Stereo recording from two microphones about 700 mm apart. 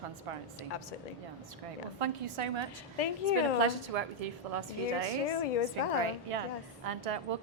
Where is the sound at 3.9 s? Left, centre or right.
Right.